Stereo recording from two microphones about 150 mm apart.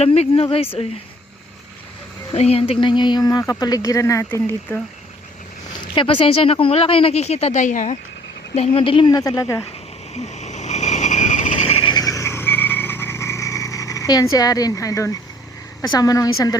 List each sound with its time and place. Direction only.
0.0 s speech: 45° left (ahead or behind)
2.3 s speech: 45° left (ahead or behind); by 4.8 s 15° left (ahead or behind)
5.9 s speech: 35° left (ahead or behind); by 7.9 s 55° left (ahead or behind)
8.5 s speech: 40° left (ahead or behind); by 9.6 s 20° left (ahead or behind)
10.2 s vehicle: 50° left (ahead or behind)
11.8 s vehicle: 30° left (ahead or behind)
15.8 s speech: 25° left (ahead or behind)